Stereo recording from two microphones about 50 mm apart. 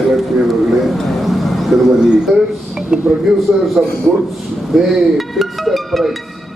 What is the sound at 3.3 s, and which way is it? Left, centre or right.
Speech, centre.